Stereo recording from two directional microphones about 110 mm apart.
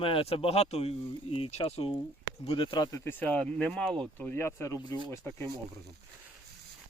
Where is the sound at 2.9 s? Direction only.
30° left (ahead or behind).